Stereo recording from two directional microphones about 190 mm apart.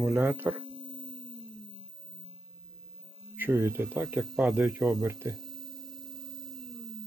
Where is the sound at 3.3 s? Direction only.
10° right (ahead or behind).